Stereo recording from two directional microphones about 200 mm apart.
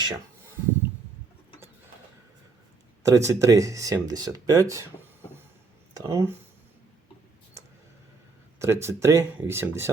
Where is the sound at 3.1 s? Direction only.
15° right (ahead or behind).